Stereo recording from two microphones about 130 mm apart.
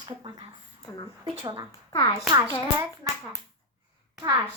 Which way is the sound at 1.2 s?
50° right (ahead or behind).